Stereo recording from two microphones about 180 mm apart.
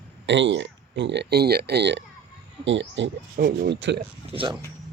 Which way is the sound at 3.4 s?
50° right (ahead or behind).